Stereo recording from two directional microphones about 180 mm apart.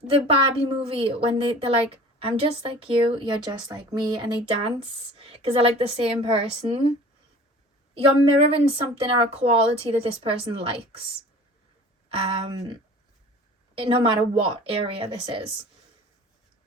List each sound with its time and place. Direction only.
0.3 s a woman's voice: 30° right (ahead or behind)
7.9 s a woman's voice: 35° right (ahead or behind)
12.1 s a woman's voice: 30° right (ahead or behind)
13.7 s speech: 30° right (ahead or behind)